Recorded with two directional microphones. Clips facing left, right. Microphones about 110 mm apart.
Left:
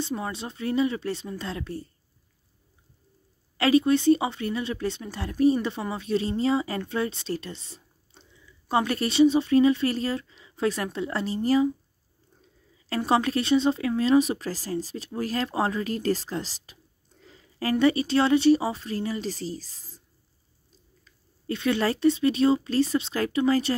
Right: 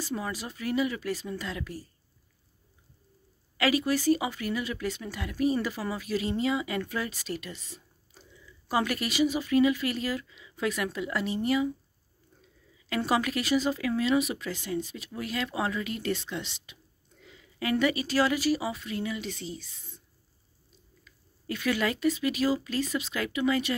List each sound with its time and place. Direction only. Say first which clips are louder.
0.0 s speech: left 3 dB; 25° left (ahead or behind)
3.5 s speech: left 6 dB; 30° left (ahead or behind)
12.8 s speech: left 4 dB; 30° left (ahead or behind)
21.0 s speech: right 1 dB; 25° left (ahead or behind)